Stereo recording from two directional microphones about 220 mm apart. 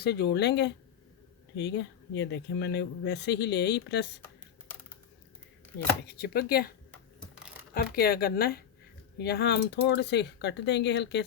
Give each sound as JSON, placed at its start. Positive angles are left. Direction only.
{"t": 0.0, "sound": "speech", "side_deg": 50}
{"t": 6.1, "sound": "speech", "side_deg": 45}